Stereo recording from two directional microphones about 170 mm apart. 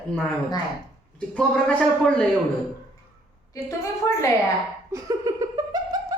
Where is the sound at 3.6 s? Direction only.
15° left (ahead or behind).